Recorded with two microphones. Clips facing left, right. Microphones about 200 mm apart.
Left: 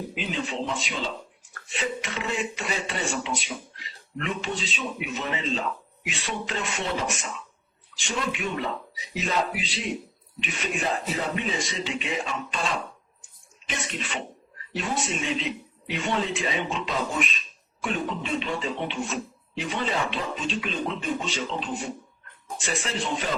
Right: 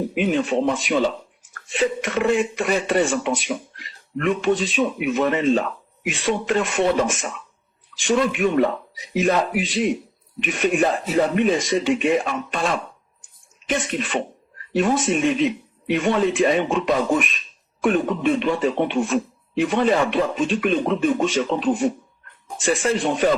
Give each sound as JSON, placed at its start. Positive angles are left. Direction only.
{"t": 0.1, "sound": "speech", "side_deg": -55}
{"t": 1.7, "sound": "speech", "side_deg": -50}